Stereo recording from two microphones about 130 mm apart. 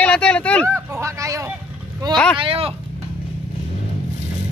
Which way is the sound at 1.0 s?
25° right (ahead or behind).